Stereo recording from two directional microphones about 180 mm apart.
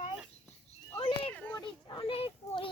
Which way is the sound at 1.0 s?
30° left (ahead or behind).